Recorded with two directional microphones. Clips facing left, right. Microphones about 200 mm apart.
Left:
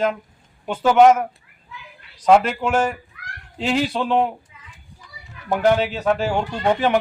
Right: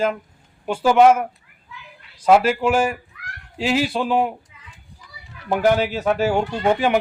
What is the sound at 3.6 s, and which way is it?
Fowl, 5° right (ahead or behind).